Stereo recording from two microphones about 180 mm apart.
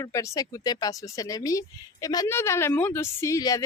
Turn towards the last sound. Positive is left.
turn(degrees=20)  # may be behind; listen again after turning